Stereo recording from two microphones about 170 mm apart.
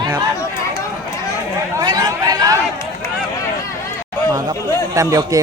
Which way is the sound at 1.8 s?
20° right (ahead or behind).